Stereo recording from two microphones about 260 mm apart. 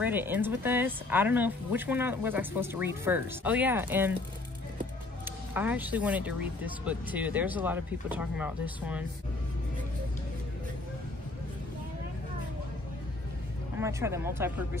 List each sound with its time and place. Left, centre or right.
0.0 s speech: centre
5.5 s speech: centre
13.7 s speech: centre